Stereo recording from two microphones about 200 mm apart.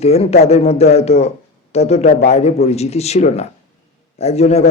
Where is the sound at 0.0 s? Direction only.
30° left (ahead or behind).